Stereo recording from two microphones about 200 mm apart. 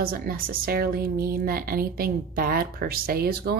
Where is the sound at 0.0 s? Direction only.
45° right (ahead or behind).